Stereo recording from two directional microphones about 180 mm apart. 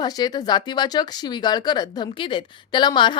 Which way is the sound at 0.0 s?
20° left (ahead or behind).